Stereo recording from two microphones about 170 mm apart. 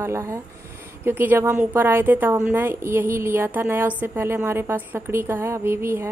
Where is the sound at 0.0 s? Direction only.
15° right (ahead or behind).